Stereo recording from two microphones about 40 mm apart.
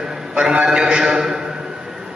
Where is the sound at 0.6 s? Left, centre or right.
Centre.